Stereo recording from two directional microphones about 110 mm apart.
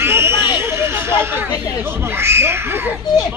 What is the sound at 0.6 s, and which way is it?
Speech, 25° right (ahead or behind).